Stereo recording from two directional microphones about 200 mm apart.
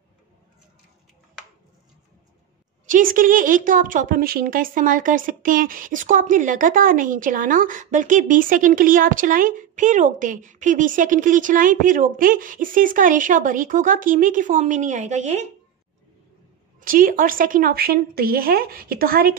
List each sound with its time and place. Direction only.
2.9 s a woman's voice: 45° right (ahead or behind)
16.8 s a woman's voice: 45° right (ahead or behind)